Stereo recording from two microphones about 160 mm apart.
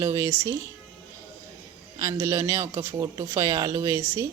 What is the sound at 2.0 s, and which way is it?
A man's voice, 20° right (ahead or behind).